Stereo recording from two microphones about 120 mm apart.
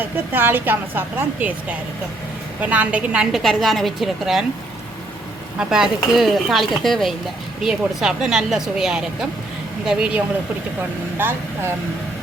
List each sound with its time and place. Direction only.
0.0 s a woman's voice: 15° right (ahead or behind)
3.3 s speech: centre (ahead or behind)
5.5 s a woman's voice: 5° right (ahead or behind)
11.2 s speech: 20° right (ahead or behind)